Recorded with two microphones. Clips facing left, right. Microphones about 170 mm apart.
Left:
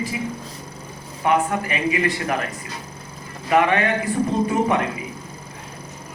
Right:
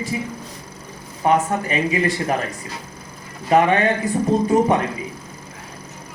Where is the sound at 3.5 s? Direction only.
30° right (ahead or behind).